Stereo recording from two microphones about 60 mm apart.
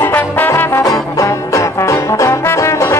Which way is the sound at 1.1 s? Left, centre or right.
Left.